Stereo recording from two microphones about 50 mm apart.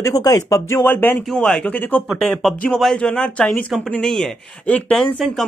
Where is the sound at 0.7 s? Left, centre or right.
Left.